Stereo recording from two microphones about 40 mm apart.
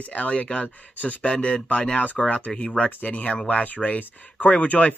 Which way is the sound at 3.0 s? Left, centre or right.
Left.